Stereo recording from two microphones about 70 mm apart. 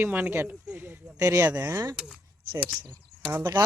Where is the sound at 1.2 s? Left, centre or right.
Right.